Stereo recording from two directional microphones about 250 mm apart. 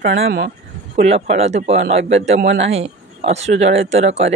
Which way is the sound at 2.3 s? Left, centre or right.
Right.